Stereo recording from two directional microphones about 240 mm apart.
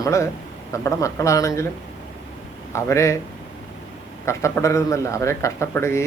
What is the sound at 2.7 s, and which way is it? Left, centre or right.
Speech, centre.